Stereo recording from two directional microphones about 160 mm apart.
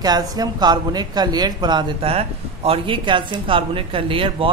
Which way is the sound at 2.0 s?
40° right (ahead or behind).